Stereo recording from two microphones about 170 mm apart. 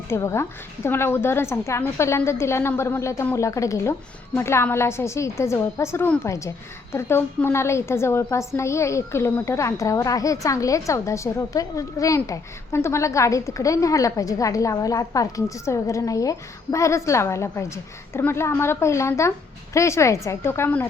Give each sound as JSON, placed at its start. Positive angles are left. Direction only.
{"t": 0.1, "sound": "a woman's voice", "side_deg": 15}